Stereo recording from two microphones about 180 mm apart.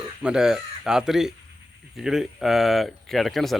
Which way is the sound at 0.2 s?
5° right (ahead or behind).